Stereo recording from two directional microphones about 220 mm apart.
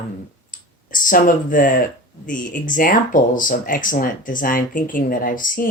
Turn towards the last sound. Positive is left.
turn(degrees=40)  # may be behind; listen again after turning